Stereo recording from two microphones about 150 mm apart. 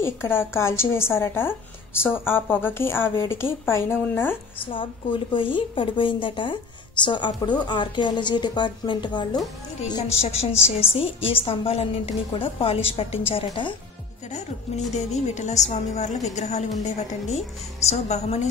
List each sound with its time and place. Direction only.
0.0 s a woman's voice: 15° left (ahead or behind)
4.7 s a woman's voice: 35° left (ahead or behind)
10.0 s a woman's voice: 45° left (ahead or behind)
14.9 s a woman's voice: 50° left (ahead or behind)